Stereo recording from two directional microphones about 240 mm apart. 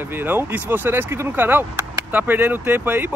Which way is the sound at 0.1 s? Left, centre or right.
Centre.